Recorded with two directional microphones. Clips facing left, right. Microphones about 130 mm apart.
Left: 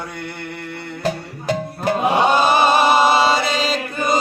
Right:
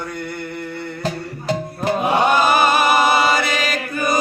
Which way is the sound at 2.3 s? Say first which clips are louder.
Even; 25° left (ahead or behind).